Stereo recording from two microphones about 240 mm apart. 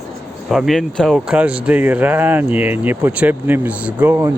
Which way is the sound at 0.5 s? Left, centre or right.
Centre.